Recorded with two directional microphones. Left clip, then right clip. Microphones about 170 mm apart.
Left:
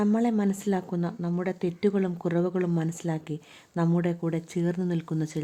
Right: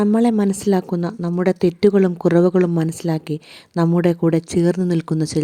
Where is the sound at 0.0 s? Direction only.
30° right (ahead or behind).